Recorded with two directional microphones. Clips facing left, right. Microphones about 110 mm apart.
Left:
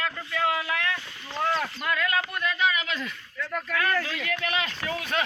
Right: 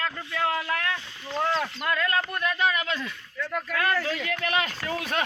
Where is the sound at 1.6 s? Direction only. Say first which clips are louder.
Right 1 dB; 30° right (ahead or behind).